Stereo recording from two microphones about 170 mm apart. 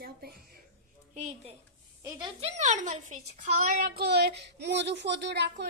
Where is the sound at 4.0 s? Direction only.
75° right (ahead or behind).